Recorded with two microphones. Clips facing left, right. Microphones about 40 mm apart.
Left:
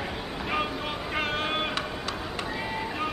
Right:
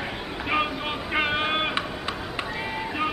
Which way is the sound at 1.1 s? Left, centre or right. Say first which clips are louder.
Right 5 dB; right.